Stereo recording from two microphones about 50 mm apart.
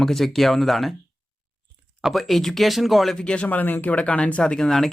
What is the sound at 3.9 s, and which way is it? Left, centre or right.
Speech, left.